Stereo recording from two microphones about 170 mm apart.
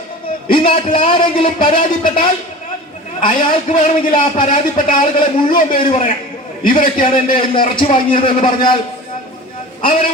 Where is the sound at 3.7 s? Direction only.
45° left (ahead or behind).